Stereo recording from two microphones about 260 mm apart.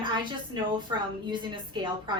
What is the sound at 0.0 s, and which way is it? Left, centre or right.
A woman's voice, centre.